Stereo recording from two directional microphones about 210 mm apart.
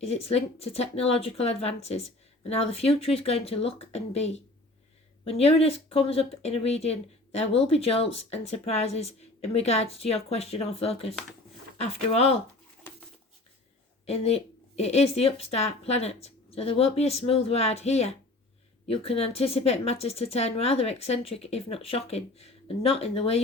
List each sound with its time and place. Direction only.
0.0 s speech: 30° left (ahead or behind)
11.1 s speech: centre (ahead or behind)
11.8 s speech: 30° left (ahead or behind)
14.1 s speech: 30° left (ahead or behind)